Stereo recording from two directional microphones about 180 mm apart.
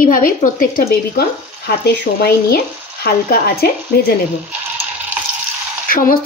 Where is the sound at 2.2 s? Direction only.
60° left (ahead or behind).